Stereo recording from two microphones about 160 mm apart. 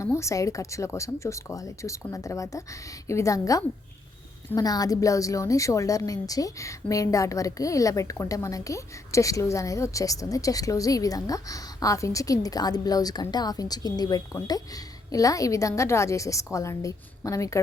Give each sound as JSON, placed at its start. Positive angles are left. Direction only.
{"t": 0.0, "sound": "a woman's voice", "side_deg": 20}